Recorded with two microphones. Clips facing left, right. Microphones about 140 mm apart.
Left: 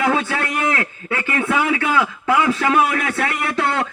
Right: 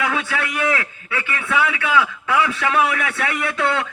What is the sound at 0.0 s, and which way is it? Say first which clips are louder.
A man's voice: left 4 dB; 35° left (ahead or behind).